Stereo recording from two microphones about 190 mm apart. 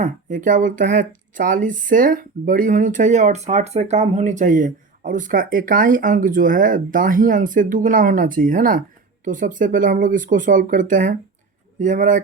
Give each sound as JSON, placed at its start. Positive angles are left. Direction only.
{"t": 0.0, "sound": "speech", "side_deg": -45}